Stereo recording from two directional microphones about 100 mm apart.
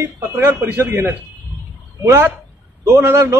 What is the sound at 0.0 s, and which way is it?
A man's voice, 25° right (ahead or behind).